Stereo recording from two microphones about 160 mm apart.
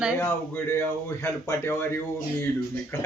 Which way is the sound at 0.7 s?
15° left (ahead or behind).